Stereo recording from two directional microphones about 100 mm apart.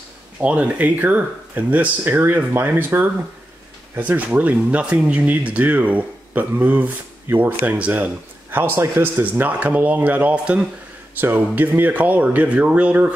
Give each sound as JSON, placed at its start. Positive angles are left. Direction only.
{"t": 0.4, "sound": "speech", "side_deg": -15}